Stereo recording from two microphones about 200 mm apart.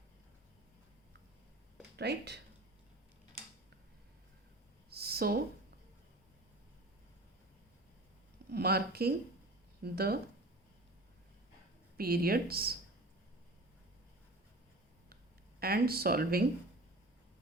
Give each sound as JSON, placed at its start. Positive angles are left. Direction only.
{"t": 2.0, "sound": "speech", "side_deg": -55}
{"t": 4.9, "sound": "a sound", "side_deg": -50}
{"t": 8.5, "sound": "speech", "side_deg": -50}
{"t": 11.9, "sound": "speech", "side_deg": -50}
{"t": 15.6, "sound": "speech", "side_deg": -50}